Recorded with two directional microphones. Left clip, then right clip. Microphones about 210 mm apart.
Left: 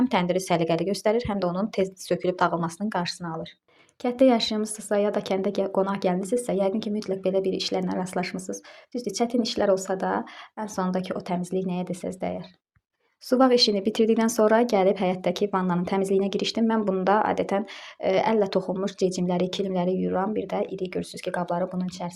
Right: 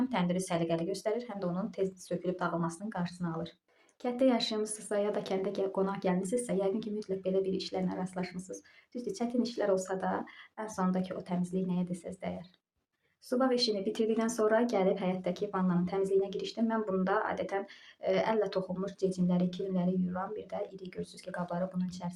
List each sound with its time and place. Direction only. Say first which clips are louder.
0.1 s speech: left 10 dB; 40° left (ahead or behind)
3.2 s speech: left 5 dB; 15° left (ahead or behind)
4.0 s speech: left 9 dB; 35° left (ahead or behind)
13.3 s speech: left 10 dB; 45° left (ahead or behind); by 22.1 s 25° left (ahead or behind)